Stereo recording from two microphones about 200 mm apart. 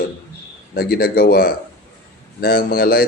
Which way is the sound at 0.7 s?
50° left (ahead or behind).